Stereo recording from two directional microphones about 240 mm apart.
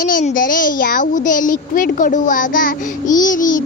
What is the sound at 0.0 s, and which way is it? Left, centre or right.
Speech, left.